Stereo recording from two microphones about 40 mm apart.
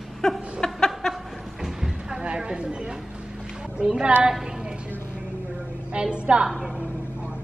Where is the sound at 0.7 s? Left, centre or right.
Centre.